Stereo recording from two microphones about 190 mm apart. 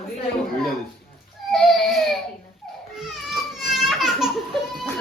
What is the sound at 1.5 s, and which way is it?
Baby cry, centre (ahead or behind).